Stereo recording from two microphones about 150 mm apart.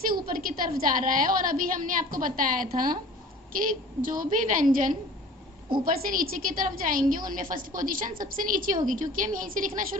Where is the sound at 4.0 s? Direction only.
65° right (ahead or behind).